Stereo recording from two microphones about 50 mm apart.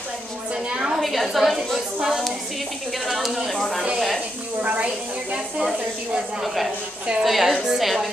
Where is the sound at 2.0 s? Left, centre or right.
Centre.